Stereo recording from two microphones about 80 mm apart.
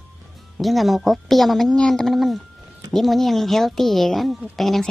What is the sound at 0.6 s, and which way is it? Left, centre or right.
A woman's voice, centre.